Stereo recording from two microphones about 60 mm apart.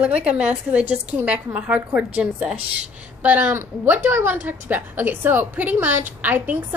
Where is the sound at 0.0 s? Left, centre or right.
Right.